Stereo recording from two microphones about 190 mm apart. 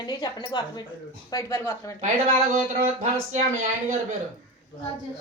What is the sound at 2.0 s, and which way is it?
Speech, 40° right (ahead or behind).